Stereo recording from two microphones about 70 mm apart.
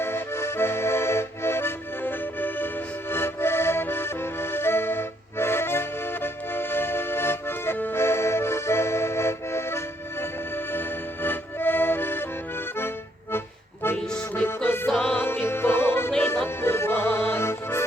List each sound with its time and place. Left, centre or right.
0.0 s accordion: left
14.3 s music: left